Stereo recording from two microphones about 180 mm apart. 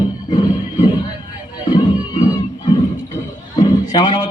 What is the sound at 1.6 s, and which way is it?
Music, 25° left (ahead or behind).